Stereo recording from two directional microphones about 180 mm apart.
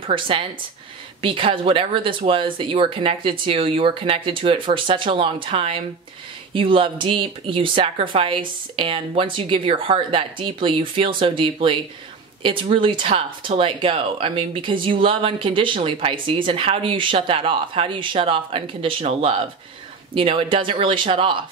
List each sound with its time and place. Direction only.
0.0 s speech: 30° right (ahead or behind)